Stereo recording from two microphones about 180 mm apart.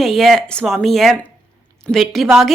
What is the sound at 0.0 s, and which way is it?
Speech, centre (ahead or behind).